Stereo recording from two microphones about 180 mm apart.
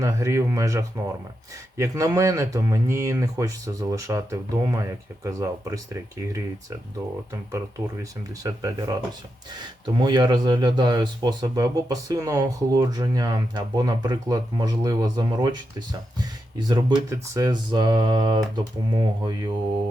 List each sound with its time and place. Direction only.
0.0 s speech: 15° right (ahead or behind)
8.4 s speech: 20° right (ahead or behind)